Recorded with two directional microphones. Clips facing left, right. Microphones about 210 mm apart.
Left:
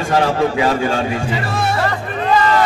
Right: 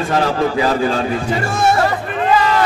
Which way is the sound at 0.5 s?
35° right (ahead or behind).